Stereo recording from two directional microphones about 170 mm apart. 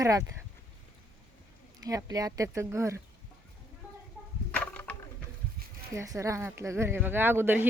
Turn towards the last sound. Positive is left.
turn(degrees=-10)  # may be behind; listen again after turning